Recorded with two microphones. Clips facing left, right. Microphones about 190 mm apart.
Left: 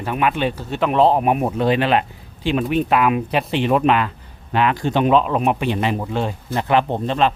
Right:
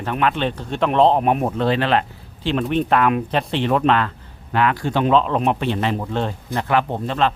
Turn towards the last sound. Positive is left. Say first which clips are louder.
# left 2 dB
turn(degrees=20)  # may be behind; listen again after turning